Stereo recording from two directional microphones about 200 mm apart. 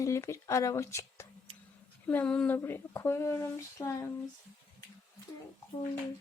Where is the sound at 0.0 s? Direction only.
15° left (ahead or behind).